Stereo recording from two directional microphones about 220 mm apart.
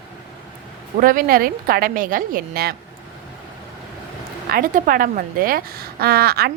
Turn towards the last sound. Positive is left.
turn(degrees=-45)  # may be behind; listen again after turning